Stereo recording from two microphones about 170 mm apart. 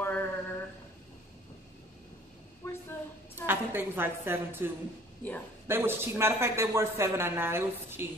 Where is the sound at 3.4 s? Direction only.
10° right (ahead or behind).